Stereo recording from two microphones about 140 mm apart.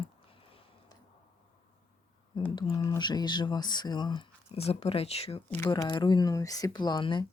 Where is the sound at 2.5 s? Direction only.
30° left (ahead or behind).